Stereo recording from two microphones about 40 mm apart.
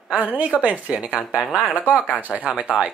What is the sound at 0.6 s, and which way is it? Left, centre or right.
Speech, right.